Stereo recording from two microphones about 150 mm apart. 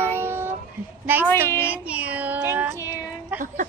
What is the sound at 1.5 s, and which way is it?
Speech, 15° left (ahead or behind).